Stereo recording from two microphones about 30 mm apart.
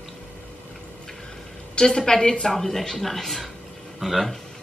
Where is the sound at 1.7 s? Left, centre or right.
Left.